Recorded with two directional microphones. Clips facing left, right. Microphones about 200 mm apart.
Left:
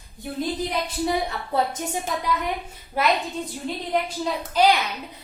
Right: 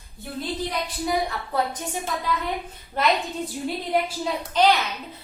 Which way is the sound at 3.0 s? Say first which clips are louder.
Even; 10° left (ahead or behind).